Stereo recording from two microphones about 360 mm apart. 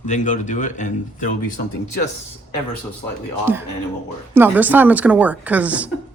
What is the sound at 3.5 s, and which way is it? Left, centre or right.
Speech, centre.